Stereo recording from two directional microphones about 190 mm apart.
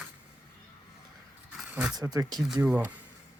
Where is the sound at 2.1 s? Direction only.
20° right (ahead or behind).